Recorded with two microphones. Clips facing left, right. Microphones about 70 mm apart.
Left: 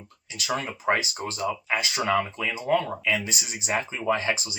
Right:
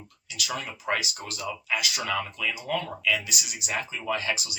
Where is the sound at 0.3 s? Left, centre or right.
Left.